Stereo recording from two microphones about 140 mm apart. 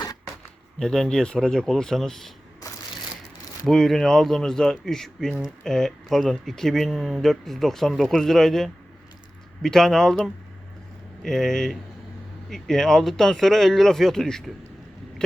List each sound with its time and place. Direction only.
0.8 s speech: 5° left (ahead or behind)
2.6 s crushing: 25° left (ahead or behind)
3.7 s speech: centre (ahead or behind)